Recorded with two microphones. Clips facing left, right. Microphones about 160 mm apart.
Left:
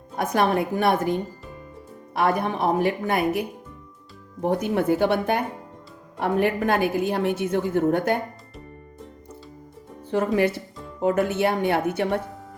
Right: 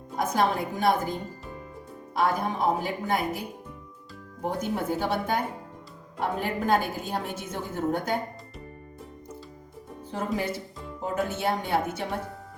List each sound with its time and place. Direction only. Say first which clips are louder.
0.2 s a woman's voice: left 4 dB; 65° left (ahead or behind)
4.4 s a woman's voice: left 7 dB; 65° left (ahead or behind)
10.1 s a woman's voice: left 8 dB; 70° left (ahead or behind)